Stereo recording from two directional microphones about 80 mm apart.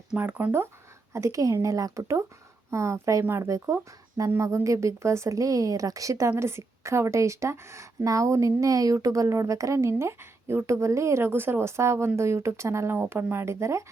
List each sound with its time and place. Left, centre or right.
0.2 s speech: right
1.1 s a woman's voice: right